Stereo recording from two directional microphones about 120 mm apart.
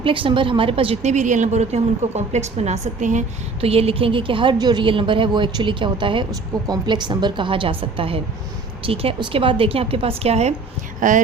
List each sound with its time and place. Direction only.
0.0 s a woman's voice: 45° right (ahead or behind)
1.1 s a woman's voice: 90° right
3.6 s a woman's voice: 55° right (ahead or behind)
11.0 s speech: 90° right